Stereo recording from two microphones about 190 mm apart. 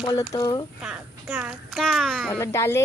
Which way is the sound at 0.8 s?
5° right (ahead or behind).